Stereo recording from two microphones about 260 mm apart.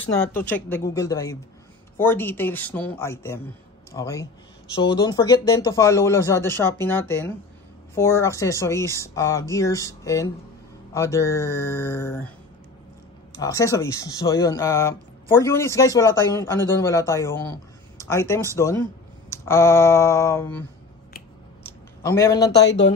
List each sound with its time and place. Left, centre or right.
0.2 s speech: centre
13.4 s speech: centre
22.0 s speech: centre
22.7 s speech: left